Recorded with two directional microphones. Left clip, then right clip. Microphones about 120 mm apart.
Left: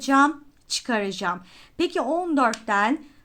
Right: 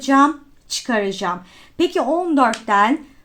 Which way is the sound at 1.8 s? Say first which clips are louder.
Right 6 dB; 25° left (ahead or behind).